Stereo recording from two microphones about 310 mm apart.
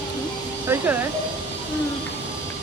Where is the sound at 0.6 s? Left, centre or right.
Centre.